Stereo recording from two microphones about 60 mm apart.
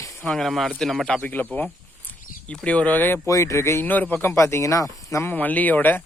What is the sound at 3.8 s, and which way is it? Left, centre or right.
Speech, left.